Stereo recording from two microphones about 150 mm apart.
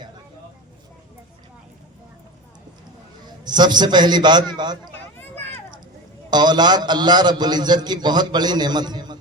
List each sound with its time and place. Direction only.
3.4 s a man's voice: 30° right (ahead or behind)
6.3 s a man's voice: 30° right (ahead or behind)